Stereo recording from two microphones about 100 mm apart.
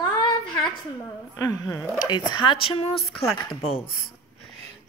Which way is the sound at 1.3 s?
35° left (ahead or behind).